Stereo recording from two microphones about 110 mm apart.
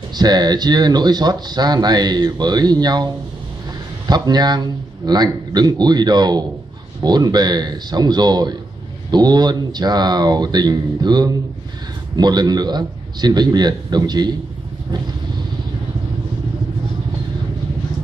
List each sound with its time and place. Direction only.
0.1 s speech: 40° right (ahead or behind)
4.1 s speech: 40° right (ahead or behind)